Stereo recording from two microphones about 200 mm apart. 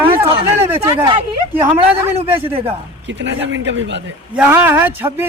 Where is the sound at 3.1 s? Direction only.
65° right (ahead or behind).